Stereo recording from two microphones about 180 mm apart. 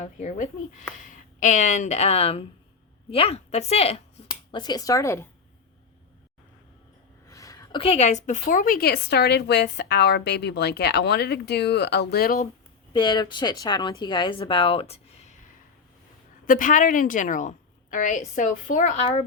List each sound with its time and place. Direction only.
0.0 s a woman's voice: 40° left (ahead or behind)
4.3 s speech: 25° left (ahead or behind)
7.3 s a sound: 20° left (ahead or behind)
7.8 s a woman's voice: 35° left (ahead or behind); by 12.5 s 55° left (ahead or behind)
12.9 s a woman's voice: 25° left (ahead or behind)
16.5 s a woman's voice: 45° left (ahead or behind)